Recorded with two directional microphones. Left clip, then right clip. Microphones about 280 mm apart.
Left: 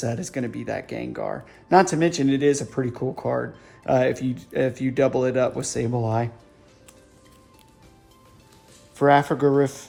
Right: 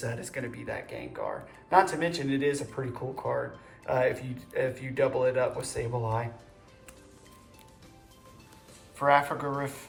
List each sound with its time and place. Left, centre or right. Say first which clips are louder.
0.0 s speech: left 7 dB; left
9.0 s speech: left 6 dB; left